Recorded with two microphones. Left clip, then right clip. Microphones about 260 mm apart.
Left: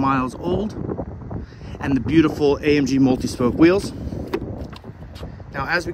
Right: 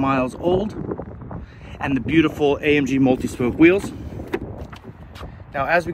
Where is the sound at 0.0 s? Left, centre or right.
Centre.